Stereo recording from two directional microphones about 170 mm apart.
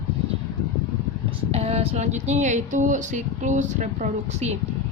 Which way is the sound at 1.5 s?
35° right (ahead or behind).